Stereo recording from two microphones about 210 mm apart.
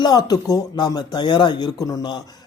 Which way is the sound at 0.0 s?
20° left (ahead or behind).